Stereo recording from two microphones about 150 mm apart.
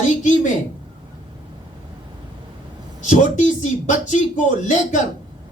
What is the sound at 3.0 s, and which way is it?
Speech, 55° left (ahead or behind).